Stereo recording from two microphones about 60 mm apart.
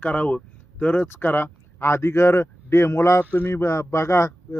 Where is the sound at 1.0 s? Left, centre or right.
Left.